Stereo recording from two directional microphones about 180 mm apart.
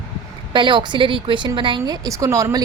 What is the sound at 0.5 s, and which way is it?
A woman's voice, 25° right (ahead or behind).